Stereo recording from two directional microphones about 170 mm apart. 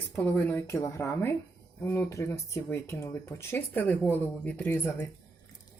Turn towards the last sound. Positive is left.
turn(degrees=10)  # may be behind; listen again after turning